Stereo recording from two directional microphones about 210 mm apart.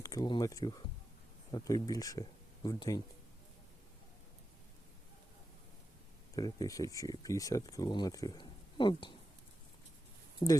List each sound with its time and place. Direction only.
0.0 s speech: 15° left (ahead or behind)
6.3 s speech: 15° left (ahead or behind)
10.4 s speech: 25° left (ahead or behind)